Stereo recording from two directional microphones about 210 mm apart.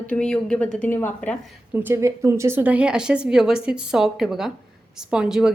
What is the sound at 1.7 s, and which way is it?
A woman's voice, 10° right (ahead or behind).